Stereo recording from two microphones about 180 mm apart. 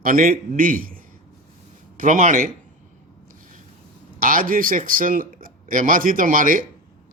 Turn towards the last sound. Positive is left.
turn(degrees=-50)  # may be behind; listen again after turning